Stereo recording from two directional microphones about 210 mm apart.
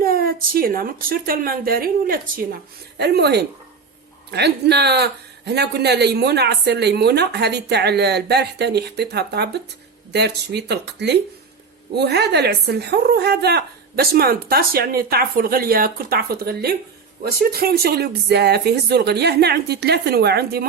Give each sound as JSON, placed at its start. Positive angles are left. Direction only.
{"t": 0.0, "sound": "a man's voice", "side_deg": -45}